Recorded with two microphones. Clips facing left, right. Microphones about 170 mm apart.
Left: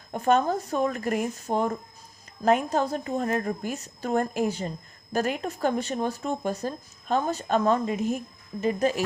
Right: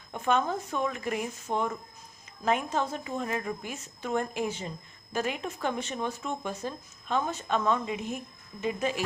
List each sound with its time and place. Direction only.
0.1 s speech: 40° left (ahead or behind)